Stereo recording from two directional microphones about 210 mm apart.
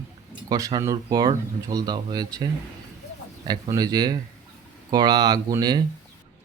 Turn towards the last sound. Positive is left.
turn(degrees=-20)  # may be behind; listen again after turning